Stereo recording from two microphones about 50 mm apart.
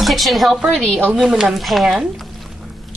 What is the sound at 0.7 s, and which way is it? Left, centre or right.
Speech, centre.